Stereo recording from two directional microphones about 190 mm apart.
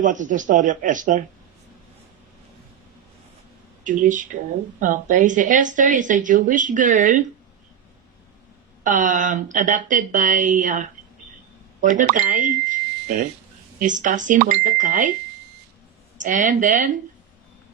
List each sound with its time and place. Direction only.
0.0 s speech: 40° right (ahead or behind)
3.8 s speech: 45° right (ahead or behind)
8.8 s speech: 40° right (ahead or behind)
13.7 s speech: 40° right (ahead or behind)
16.1 s speech: 40° right (ahead or behind)